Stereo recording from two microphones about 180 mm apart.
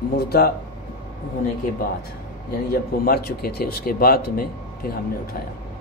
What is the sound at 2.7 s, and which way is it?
Speech, 55° left (ahead or behind).